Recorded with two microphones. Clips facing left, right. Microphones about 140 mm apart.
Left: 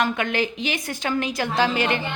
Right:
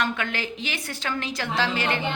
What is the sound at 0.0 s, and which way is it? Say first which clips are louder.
A woman's voice: left 5 dB; 15° left (ahead or behind).